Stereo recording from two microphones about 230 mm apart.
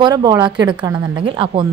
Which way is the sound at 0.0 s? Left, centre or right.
Centre.